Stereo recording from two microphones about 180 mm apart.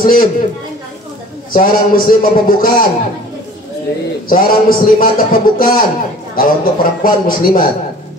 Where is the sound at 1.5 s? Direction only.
50° left (ahead or behind).